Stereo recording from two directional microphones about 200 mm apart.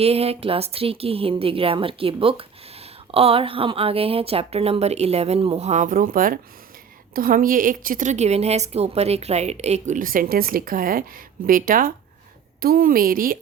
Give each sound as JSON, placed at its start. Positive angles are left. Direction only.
{"t": 0.0, "sound": "a woman's voice", "side_deg": -30}